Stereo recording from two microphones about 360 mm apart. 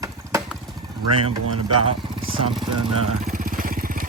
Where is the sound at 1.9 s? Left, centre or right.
Centre.